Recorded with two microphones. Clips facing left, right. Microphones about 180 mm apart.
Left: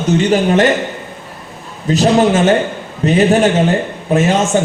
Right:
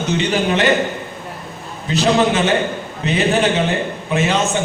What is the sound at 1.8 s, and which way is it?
Speech, 45° left (ahead or behind).